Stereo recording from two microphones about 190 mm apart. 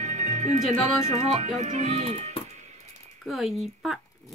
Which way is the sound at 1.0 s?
40° right (ahead or behind).